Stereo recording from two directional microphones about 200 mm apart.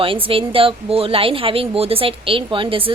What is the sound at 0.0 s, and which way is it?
A woman's voice, 25° right (ahead or behind).